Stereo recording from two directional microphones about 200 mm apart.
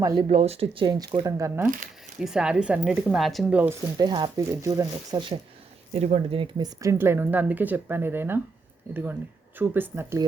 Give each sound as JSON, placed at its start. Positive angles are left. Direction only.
{"t": 0.0, "sound": "a woman's voice", "side_deg": -25}
{"t": 3.9, "sound": "speech", "side_deg": -20}
{"t": 5.9, "sound": "a woman's voice", "side_deg": -30}